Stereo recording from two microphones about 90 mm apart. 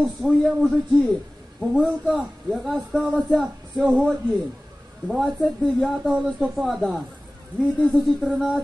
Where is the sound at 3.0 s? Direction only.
15° right (ahead or behind); by 6.1 s 5° left (ahead or behind).